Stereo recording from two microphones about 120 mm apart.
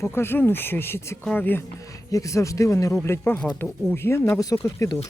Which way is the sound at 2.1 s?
25° left (ahead or behind).